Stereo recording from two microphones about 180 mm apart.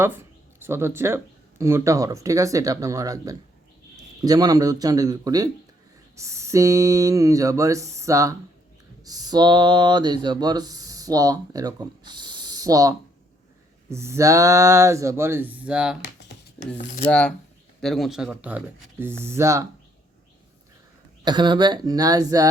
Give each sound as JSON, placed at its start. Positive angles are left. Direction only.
{"t": 0.0, "sound": "speech", "side_deg": -15}
{"t": 17.1, "sound": "speech", "side_deg": 5}
{"t": 21.2, "sound": "speech", "side_deg": -25}